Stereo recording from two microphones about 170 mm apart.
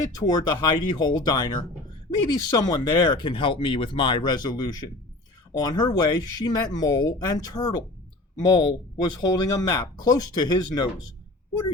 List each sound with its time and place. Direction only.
0.1 s speech: 25° left (ahead or behind)